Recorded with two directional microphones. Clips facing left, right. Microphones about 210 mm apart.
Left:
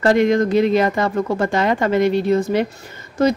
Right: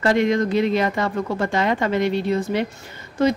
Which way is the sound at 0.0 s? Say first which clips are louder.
Left 4 dB; 45° left (ahead or behind).